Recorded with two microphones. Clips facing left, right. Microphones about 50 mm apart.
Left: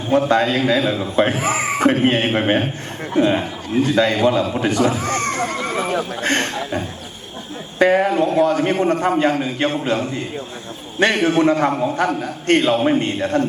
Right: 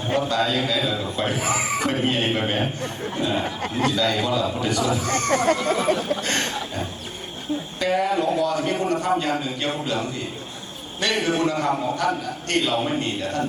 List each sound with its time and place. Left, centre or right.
0.1 s a man's voice: left
5.5 s a sound: left
7.8 s a man's voice: left